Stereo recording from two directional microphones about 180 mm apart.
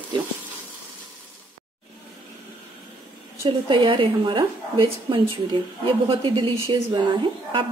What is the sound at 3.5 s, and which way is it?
A woman's voice, 30° right (ahead or behind).